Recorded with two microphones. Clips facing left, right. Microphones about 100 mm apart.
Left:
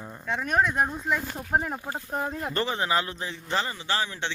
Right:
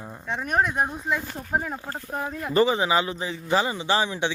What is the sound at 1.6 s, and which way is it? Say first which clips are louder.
Speech: even; 20° left (ahead or behind).